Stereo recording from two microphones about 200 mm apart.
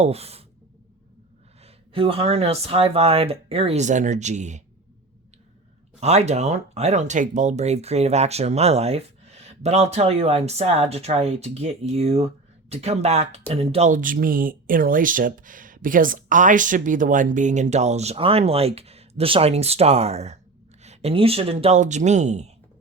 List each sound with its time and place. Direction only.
0.0 s speech: 30° right (ahead or behind)
1.6 s speech: 30° right (ahead or behind)
6.0 s speech: 35° right (ahead or behind)